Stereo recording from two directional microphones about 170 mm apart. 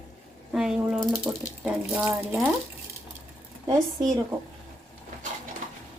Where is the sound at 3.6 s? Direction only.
20° right (ahead or behind).